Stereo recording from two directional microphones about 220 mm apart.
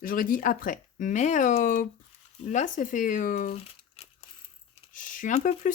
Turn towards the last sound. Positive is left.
turn(degrees=35)  # may be behind; listen again after turning